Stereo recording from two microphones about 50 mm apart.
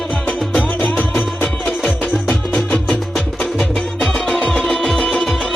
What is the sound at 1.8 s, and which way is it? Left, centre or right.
Music, centre.